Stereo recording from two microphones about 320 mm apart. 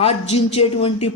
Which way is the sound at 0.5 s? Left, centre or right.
Centre.